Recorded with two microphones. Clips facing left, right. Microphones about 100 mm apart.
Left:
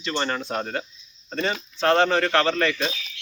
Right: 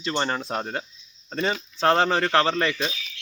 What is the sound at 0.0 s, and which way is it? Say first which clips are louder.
Speech: even; 30° right (ahead or behind).